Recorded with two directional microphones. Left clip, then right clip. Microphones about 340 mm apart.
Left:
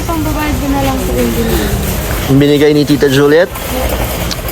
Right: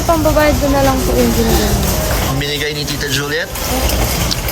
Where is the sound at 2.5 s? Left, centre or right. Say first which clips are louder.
Left 10 dB; centre.